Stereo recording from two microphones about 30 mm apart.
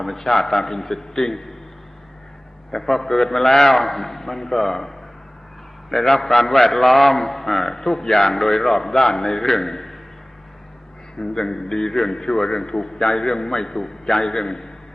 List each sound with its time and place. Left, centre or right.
0.0 s a man's voice: centre
2.7 s a man's voice: centre
11.2 s a man's voice: centre